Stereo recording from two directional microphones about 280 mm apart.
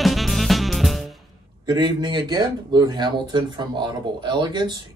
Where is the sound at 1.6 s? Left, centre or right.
Centre.